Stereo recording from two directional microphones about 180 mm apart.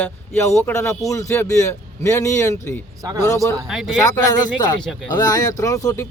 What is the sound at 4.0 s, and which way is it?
Speech, 20° left (ahead or behind).